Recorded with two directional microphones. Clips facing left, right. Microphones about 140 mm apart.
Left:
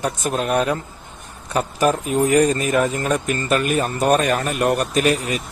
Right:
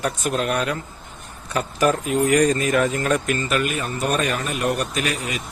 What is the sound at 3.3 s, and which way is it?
Speech, 40° left (ahead or behind).